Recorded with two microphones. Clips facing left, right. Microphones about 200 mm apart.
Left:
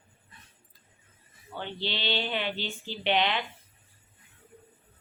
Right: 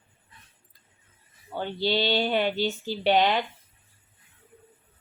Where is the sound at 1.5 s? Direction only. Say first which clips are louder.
Right 8 dB; 40° right (ahead or behind).